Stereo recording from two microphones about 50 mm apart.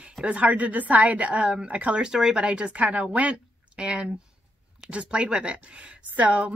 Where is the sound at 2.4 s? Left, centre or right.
Right.